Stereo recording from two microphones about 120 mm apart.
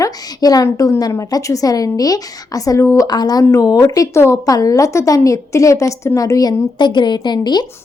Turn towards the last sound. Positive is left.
turn(degrees=35)  # may be behind; listen again after turning